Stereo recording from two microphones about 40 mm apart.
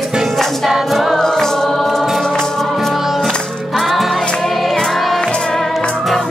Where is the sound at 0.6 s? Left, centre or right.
Centre.